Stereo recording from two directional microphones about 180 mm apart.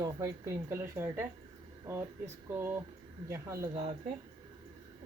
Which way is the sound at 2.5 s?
15° right (ahead or behind).